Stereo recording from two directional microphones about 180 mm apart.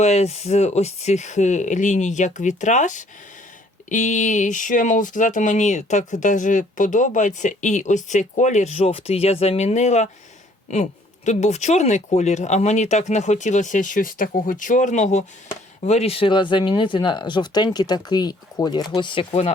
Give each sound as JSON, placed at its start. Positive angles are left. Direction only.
{"t": 0.0, "sound": "speech", "side_deg": 40}